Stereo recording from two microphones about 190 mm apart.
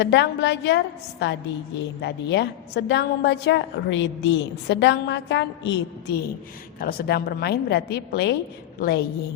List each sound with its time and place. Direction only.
0.0 s a woman's voice: 65° left (ahead or behind)
2.0 s a woman's voice: 65° left (ahead or behind)
6.7 s a woman's voice: 50° left (ahead or behind)